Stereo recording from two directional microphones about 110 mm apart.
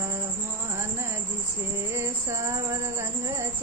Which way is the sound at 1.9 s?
25° right (ahead or behind).